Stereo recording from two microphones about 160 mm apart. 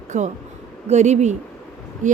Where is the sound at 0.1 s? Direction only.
45° right (ahead or behind).